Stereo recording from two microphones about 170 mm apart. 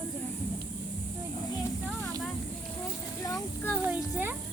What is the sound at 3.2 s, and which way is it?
Speech, 20° left (ahead or behind).